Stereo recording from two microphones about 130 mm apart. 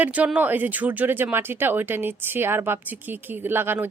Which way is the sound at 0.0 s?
10° right (ahead or behind).